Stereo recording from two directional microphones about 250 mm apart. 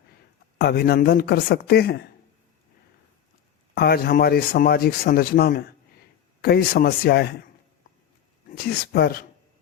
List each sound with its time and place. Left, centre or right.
0.6 s speech: left
3.8 s speech: left
8.4 s speech: left